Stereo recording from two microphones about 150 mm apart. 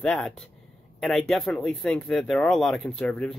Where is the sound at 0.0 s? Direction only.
5° left (ahead or behind).